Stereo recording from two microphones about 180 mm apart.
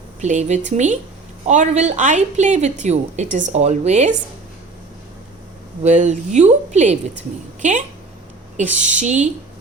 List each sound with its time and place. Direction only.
0.2 s a woman's voice: 40° right (ahead or behind)
5.8 s a woman's voice: 40° right (ahead or behind)